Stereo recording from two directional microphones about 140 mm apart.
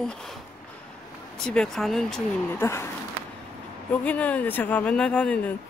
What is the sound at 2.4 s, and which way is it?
Speech, 15° left (ahead or behind).